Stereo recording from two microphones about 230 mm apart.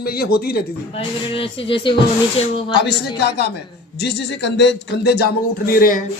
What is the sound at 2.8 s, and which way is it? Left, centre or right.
Speech, left.